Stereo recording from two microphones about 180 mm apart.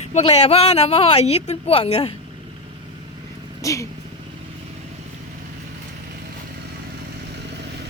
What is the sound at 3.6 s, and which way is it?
Speech, 15° left (ahead or behind).